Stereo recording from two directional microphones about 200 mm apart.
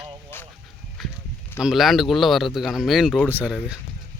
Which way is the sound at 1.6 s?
Centre (ahead or behind).